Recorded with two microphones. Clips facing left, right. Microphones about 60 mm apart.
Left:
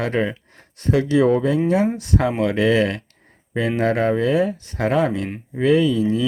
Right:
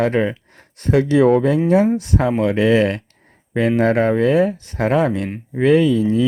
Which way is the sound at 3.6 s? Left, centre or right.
Right.